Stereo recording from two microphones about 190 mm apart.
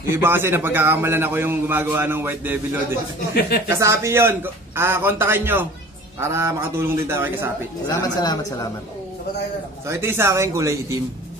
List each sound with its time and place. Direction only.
0.1 s a man's voice: 10° right (ahead or behind)
3.3 s speech: 55° left (ahead or behind)
3.7 s a man's voice: 15° right (ahead or behind)
8.2 s a man's voice: 20° left (ahead or behind)
9.8 s a man's voice: 15° right (ahead or behind)